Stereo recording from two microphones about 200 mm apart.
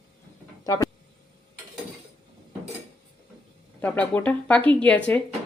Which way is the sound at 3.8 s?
5° left (ahead or behind).